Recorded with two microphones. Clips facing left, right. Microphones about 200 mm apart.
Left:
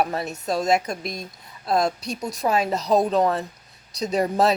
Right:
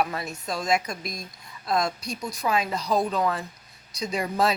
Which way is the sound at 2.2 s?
40° left (ahead or behind).